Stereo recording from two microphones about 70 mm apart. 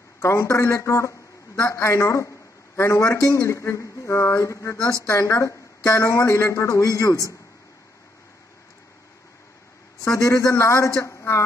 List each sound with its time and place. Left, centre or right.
0.2 s a man's voice: left
10.0 s a man's voice: left